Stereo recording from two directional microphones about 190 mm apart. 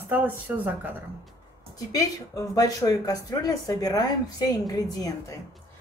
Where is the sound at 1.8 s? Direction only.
20° left (ahead or behind).